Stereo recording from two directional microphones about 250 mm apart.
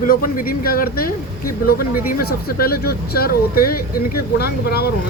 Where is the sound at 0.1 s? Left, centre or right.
Left.